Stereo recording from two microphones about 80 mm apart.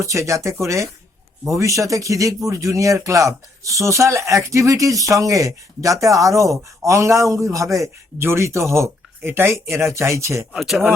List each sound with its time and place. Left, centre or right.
0.0 s a man's voice: right
10.5 s speech: centre